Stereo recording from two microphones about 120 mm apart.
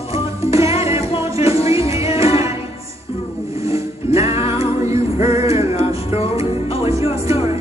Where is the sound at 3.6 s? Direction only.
25° right (ahead or behind).